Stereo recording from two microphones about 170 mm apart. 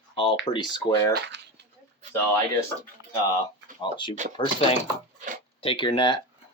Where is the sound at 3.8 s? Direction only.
30° left (ahead or behind).